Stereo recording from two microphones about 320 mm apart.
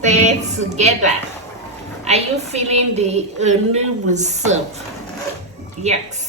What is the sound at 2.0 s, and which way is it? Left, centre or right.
A woman's voice, centre.